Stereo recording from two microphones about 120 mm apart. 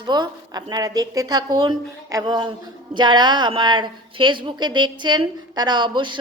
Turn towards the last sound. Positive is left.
turn(degrees=-40)  # may be behind; listen again after turning